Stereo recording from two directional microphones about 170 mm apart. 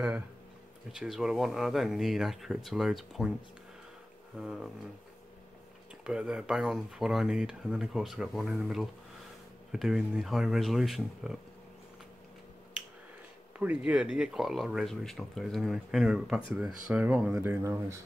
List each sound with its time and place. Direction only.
0.9 s speech: centre (ahead or behind)
4.4 s speech: centre (ahead or behind)
6.0 s speech: 5° right (ahead or behind)
13.6 s speech: 5° right (ahead or behind)